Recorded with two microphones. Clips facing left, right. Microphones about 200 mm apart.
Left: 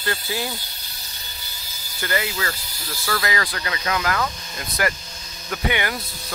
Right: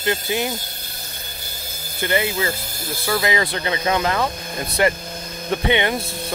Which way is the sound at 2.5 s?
50° right (ahead or behind).